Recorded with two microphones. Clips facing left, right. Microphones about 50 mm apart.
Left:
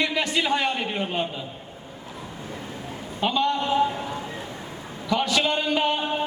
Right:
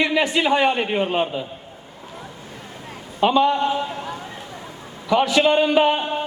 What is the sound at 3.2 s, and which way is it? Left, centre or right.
Speech, centre.